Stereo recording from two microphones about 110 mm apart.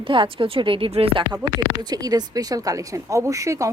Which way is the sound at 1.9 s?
35° right (ahead or behind).